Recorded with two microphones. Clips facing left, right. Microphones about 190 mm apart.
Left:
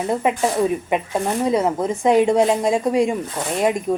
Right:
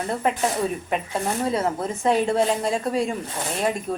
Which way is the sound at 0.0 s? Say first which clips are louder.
Left 4 dB; 15° left (ahead or behind).